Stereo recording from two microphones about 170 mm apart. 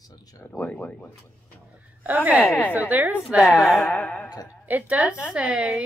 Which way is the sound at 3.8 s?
10° left (ahead or behind).